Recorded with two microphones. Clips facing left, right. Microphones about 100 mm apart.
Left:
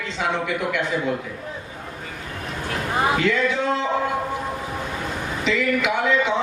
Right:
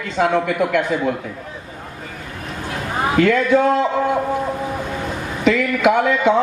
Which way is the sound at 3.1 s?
50° right (ahead or behind).